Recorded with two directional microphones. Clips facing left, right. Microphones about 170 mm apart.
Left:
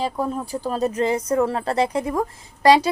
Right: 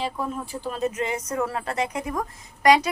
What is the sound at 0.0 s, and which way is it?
Speech, 40° left (ahead or behind).